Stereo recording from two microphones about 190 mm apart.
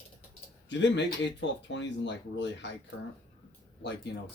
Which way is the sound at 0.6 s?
70° left (ahead or behind).